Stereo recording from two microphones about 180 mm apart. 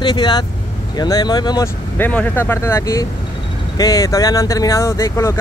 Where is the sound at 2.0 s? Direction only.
10° left (ahead or behind).